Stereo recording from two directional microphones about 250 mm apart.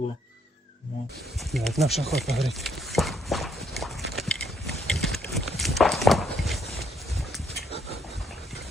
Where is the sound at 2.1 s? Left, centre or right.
Centre.